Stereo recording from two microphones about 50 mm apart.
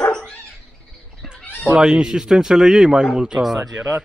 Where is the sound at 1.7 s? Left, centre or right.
Centre.